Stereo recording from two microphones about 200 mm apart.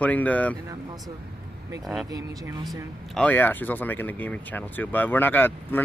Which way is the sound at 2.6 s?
5° left (ahead or behind).